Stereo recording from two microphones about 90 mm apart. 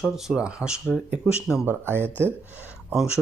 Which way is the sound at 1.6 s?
25° right (ahead or behind).